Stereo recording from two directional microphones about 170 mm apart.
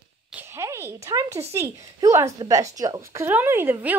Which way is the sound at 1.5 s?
15° right (ahead or behind).